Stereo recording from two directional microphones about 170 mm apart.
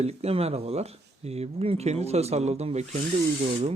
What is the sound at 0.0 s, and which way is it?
Speech, 35° right (ahead or behind).